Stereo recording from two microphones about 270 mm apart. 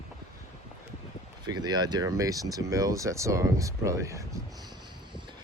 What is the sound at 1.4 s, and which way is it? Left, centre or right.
Speech, centre.